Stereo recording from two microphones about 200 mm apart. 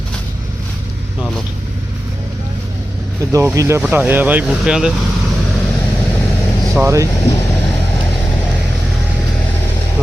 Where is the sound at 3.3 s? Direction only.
15° right (ahead or behind).